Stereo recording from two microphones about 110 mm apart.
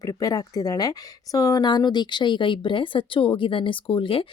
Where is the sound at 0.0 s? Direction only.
35° left (ahead or behind).